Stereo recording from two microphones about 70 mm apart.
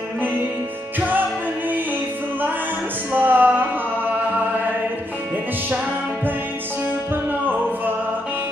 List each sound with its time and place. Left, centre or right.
3.1 s music: right